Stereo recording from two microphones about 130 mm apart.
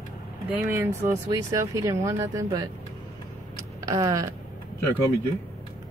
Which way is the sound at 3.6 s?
25° right (ahead or behind).